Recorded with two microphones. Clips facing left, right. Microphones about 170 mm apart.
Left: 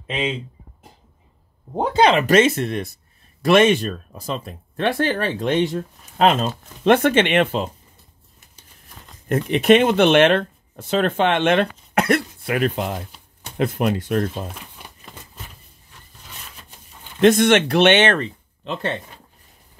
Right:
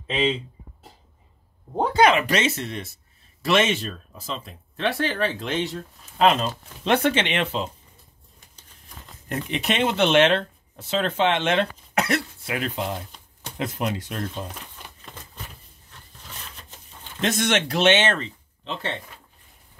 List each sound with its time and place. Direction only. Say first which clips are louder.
2.0 s speech: left 2 dB; 30° left (ahead or behind)
2.2 s speech: left 8 dB; 50° left (ahead or behind)
9.3 s speech: left 12 dB; 55° left (ahead or behind)
13.1 s a sound: left 1 dB; 5° left (ahead or behind)
13.6 s speech: left 7 dB; 55° left (ahead or behind)
17.2 s speech: left 9 dB; 55° left (ahead or behind)